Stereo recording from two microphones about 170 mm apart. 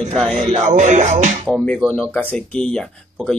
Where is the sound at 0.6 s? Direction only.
45° right (ahead or behind).